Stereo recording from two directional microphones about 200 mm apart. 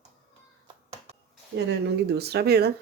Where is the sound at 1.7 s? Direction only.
55° right (ahead or behind).